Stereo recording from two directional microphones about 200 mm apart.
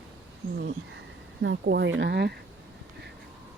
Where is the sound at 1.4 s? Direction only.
60° right (ahead or behind).